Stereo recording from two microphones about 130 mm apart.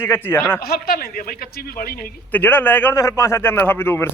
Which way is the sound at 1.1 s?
90° left.